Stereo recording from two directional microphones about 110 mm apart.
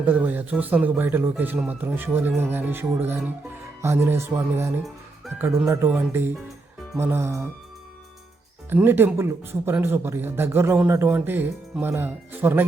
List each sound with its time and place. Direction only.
0.0 s a man's voice: 15° right (ahead or behind)
5.9 s a man's voice: 10° right (ahead or behind)
6.9 s speech: 20° right (ahead or behind)
8.7 s a man's voice: 20° right (ahead or behind)